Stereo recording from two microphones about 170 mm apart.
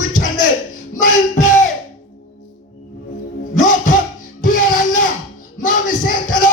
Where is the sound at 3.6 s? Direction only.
50° left (ahead or behind).